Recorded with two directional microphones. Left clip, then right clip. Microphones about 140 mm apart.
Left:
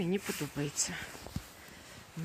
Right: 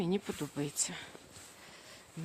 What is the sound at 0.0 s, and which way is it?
Speech, 30° right (ahead or behind).